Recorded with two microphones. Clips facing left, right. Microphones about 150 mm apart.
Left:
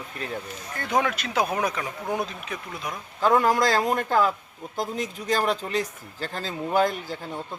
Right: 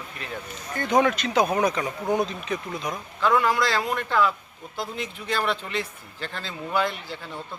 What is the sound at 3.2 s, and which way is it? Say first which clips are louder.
A man's voice: left 2 dB; 40° left (ahead or behind).